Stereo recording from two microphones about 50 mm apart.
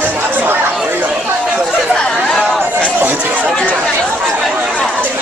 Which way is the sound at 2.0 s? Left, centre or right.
Centre.